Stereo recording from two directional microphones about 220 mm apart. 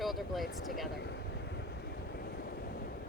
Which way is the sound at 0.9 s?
50° left (ahead or behind).